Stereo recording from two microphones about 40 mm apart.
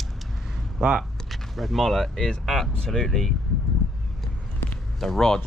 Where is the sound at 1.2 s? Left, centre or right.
Centre.